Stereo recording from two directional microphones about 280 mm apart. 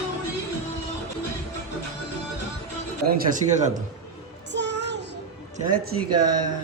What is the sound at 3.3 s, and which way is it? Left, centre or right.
Speech, right.